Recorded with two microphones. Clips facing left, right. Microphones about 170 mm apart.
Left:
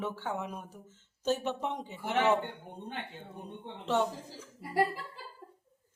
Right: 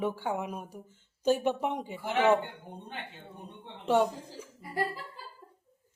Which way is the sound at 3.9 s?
10° right (ahead or behind).